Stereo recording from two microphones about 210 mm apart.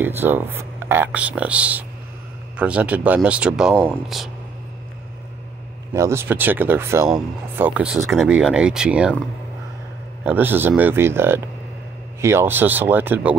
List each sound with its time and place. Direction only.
0.0 s speech: 10° right (ahead or behind)
5.9 s speech: 15° right (ahead or behind)
10.2 s speech: 10° right (ahead or behind)